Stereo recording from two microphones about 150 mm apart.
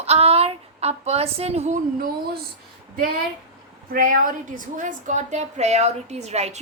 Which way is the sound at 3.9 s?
65° right (ahead or behind).